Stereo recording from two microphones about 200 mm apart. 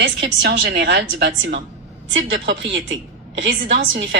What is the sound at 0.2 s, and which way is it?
A woman's voice, 60° right (ahead or behind).